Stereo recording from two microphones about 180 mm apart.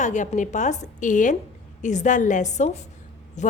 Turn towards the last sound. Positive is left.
turn(degrees=40)  # may be behind; listen again after turning